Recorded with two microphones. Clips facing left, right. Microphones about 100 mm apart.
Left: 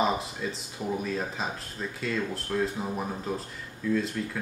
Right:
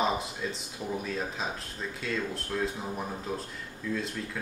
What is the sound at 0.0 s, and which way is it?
Speech, centre (ahead or behind).